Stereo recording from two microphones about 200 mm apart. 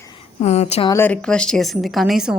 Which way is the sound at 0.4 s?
35° left (ahead or behind).